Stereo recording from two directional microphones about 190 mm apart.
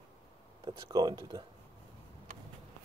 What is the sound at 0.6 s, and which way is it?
Speech, 20° right (ahead or behind).